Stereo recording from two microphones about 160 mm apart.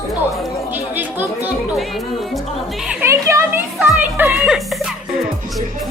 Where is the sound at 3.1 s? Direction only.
20° right (ahead or behind).